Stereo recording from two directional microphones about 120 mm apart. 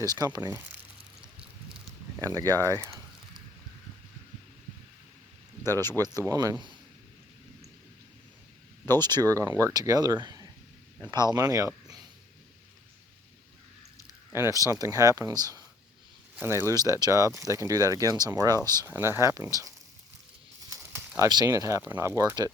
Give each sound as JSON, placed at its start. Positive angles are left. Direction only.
{"t": 0.0, "sound": "speech", "side_deg": -30}
{"t": 1.7, "sound": "a sound", "side_deg": -5}
{"t": 2.2, "sound": "speech", "side_deg": -30}
{"t": 6.1, "sound": "speech", "side_deg": -30}
{"t": 8.9, "sound": "speech", "side_deg": -35}
{"t": 14.3, "sound": "speech", "side_deg": -25}
{"t": 16.3, "sound": "speech", "side_deg": -20}
{"t": 18.9, "sound": "speech", "side_deg": -20}
{"t": 20.6, "sound": "a sound", "side_deg": -30}
{"t": 21.2, "sound": "speech", "side_deg": -30}